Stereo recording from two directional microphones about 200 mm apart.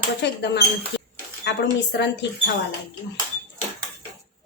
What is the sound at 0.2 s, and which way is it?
Speech, 55° left (ahead or behind).